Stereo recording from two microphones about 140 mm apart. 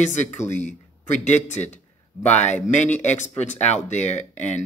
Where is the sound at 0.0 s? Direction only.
55° left (ahead or behind).